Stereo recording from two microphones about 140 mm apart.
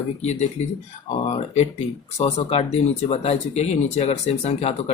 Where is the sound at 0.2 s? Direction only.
50° left (ahead or behind).